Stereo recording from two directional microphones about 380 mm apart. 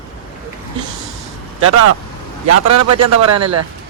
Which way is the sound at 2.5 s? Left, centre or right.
Right.